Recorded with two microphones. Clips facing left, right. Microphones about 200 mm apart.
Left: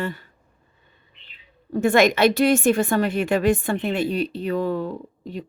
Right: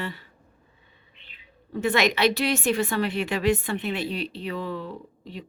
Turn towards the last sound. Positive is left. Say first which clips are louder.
# left 6 dB
turn(degrees=45)  # may be behind; listen again after turning